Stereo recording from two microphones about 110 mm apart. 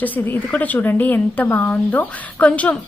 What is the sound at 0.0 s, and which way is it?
A woman's voice, 15° left (ahead or behind).